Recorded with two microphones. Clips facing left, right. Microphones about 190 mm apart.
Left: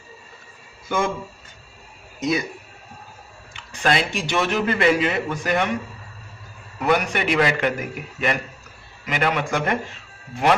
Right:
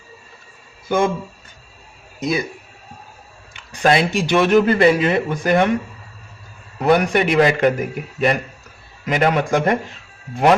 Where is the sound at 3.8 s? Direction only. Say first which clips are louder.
Right 6 dB; 40° right (ahead or behind).